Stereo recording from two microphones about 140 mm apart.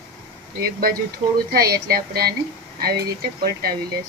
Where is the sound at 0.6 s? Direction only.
90° right.